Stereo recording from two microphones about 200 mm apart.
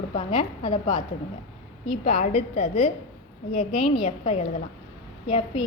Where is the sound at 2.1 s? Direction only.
35° left (ahead or behind).